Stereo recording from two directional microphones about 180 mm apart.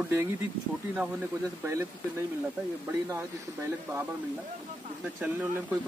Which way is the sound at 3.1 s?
15° right (ahead or behind).